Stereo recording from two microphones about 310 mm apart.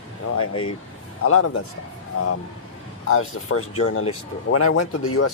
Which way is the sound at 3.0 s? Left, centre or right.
Left.